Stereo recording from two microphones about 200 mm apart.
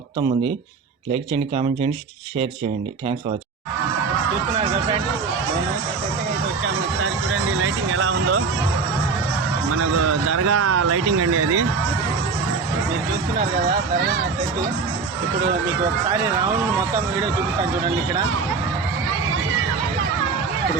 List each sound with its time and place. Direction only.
1.1 s speech: 25° right (ahead or behind)
4.5 s speech: 30° right (ahead or behind)
7.6 s a man's voice: 90° right
9.8 s a man's voice: 90° right